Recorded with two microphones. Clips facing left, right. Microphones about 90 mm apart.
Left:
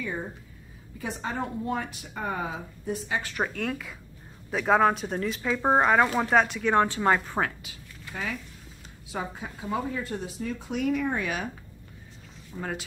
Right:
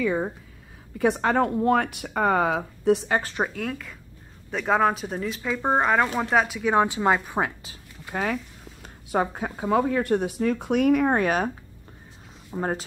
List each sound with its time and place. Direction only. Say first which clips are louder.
0.9 s speech: right 11 dB; 65° right (ahead or behind)
3.4 s speech: right 1 dB; centre (ahead or behind)
8.1 s speech: right 7 dB; 55° right (ahead or behind)
12.5 s speech: right 7 dB; 40° right (ahead or behind)